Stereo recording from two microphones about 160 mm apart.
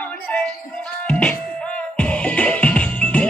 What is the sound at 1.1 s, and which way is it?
Music, 5° left (ahead or behind).